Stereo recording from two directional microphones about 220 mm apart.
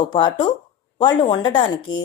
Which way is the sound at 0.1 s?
20° left (ahead or behind).